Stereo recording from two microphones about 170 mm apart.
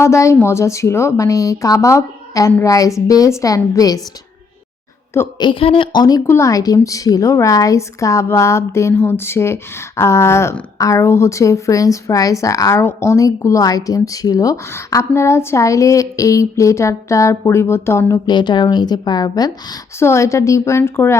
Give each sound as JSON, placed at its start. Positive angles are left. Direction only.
{"t": 0.0, "sound": "a woman's voice", "side_deg": 15}
{"t": 5.4, "sound": "a woman's voice", "side_deg": 30}